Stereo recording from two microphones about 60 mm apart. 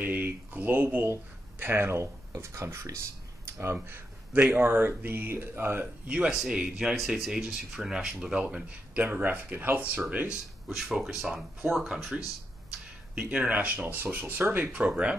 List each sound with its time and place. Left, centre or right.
0.0 s speech: right
3.4 s a sound: right
3.8 s a sound: right
4.4 s speech: right
6.0 s speech: centre
7.0 s speech: centre; by 10.0 s right
10.7 s speech: centre
13.1 s speech: centre
14.7 s speech: centre